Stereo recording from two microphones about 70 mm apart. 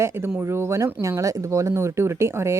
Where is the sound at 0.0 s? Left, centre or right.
Right.